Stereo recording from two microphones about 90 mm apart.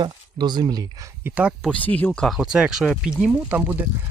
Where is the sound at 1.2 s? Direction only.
15° right (ahead or behind).